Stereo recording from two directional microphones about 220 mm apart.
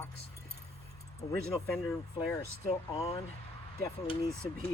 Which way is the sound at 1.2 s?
25° left (ahead or behind).